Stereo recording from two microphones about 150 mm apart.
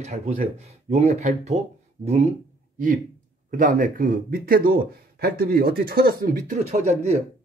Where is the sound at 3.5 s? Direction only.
60° right (ahead or behind).